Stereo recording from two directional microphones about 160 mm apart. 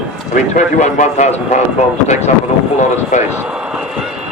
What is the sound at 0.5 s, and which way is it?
Speech, 50° left (ahead or behind).